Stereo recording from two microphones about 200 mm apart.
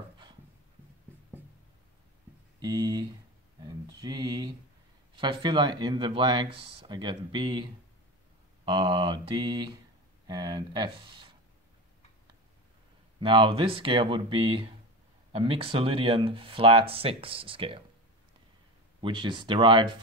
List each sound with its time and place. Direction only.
2.6 s speech: 20° right (ahead or behind)
3.6 s a sound: 20° right (ahead or behind)
5.1 s speech: 25° right (ahead or behind)
8.6 s speech: 25° right (ahead or behind)
13.2 s speech: 25° right (ahead or behind)
18.9 s speech: 25° right (ahead or behind)